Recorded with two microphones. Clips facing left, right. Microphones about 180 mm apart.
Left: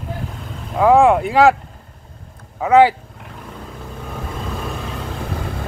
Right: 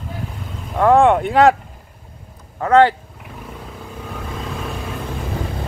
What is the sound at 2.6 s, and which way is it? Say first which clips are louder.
Speech: left 1 dB; 5° left (ahead or behind).